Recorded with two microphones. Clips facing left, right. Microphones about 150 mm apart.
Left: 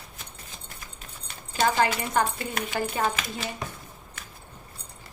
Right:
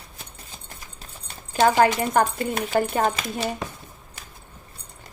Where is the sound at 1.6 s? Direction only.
50° right (ahead or behind).